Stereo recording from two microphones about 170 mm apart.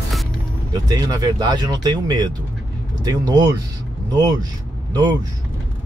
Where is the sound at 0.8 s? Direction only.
20° right (ahead or behind).